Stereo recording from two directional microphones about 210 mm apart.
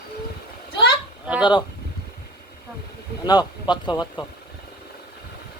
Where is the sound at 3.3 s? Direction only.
20° left (ahead or behind).